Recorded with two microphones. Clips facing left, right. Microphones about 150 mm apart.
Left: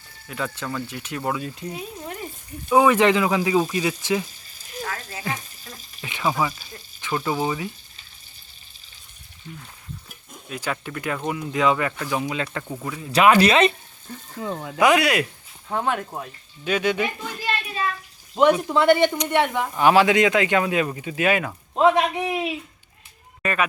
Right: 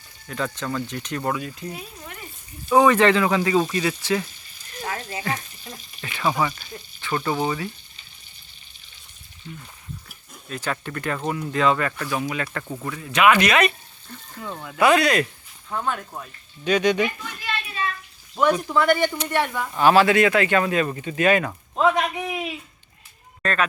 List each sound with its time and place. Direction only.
0.3 s speech: 10° left (ahead or behind)
6.1 s a sound: 15° left (ahead or behind)
6.3 s speech: 5° left (ahead or behind)
10.5 s speech: 10° left (ahead or behind)
12.7 s speech: 5° left (ahead or behind)
13.1 s a woman's voice: 35° left (ahead or behind)
14.8 s speech: 10° left (ahead or behind)
17.2 s a sound: 35° left (ahead or behind)
18.7 s a woman's voice: 25° left (ahead or behind); by 21.5 s 10° left (ahead or behind)
21.8 s a woman's voice: 25° left (ahead or behind)
23.4 s speech: 10° left (ahead or behind)